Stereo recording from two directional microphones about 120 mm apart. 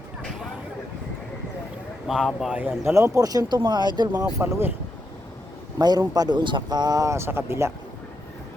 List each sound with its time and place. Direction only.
2.0 s speech: centre (ahead or behind)
2.6 s speech: 20° right (ahead or behind); by 4.3 s 35° right (ahead or behind)
4.4 s speech: 20° right (ahead or behind)
5.8 s speech: 35° right (ahead or behind)